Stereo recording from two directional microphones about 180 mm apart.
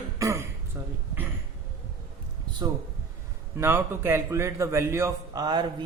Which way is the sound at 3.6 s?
15° right (ahead or behind).